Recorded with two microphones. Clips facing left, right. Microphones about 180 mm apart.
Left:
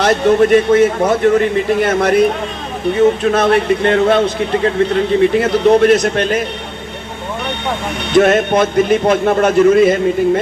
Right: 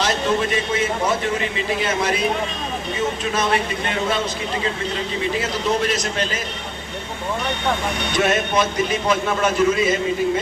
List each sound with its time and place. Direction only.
0.0 s a man's voice: 60° left (ahead or behind)
8.1 s a man's voice: 55° left (ahead or behind)